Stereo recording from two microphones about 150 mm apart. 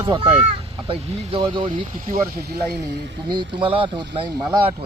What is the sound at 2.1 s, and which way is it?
Speech, 90° right.